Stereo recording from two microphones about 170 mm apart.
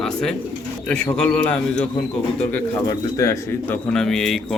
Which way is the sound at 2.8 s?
20° left (ahead or behind).